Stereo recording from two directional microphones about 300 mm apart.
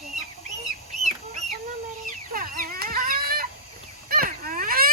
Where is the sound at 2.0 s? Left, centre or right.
Right.